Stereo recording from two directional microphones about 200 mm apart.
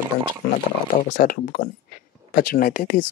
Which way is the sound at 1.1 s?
45° left (ahead or behind).